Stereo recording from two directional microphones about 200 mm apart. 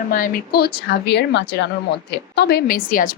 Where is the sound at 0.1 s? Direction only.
45° left (ahead or behind).